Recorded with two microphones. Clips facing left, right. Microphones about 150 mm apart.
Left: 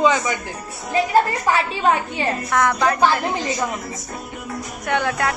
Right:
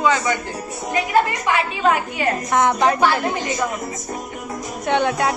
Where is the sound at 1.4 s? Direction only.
30° left (ahead or behind).